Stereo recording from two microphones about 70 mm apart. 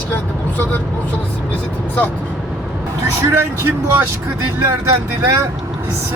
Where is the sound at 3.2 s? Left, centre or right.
Right.